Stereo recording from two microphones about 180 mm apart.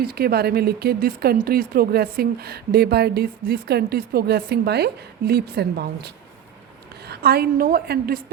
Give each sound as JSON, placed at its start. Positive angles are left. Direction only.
{"t": 0.0, "sound": "a woman's voice", "side_deg": -60}